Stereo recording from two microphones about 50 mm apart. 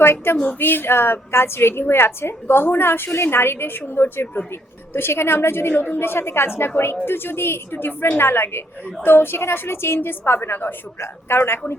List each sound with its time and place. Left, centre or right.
0.0 s a woman's voice: left